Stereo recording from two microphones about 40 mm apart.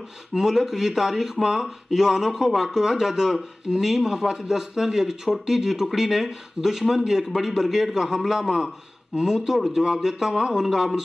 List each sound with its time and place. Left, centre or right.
0.3 s speech: centre